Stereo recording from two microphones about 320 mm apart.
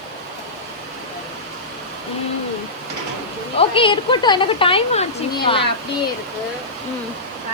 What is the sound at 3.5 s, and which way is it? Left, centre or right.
A woman's voice, centre.